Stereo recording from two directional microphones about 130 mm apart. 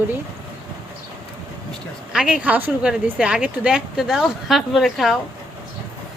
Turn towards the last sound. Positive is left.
turn(degrees=0)  # may be behind; listen again after turning